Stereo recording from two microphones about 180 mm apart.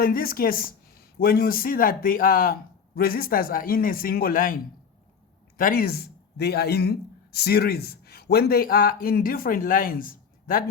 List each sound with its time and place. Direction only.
0.0 s a man's voice: 55° left (ahead or behind)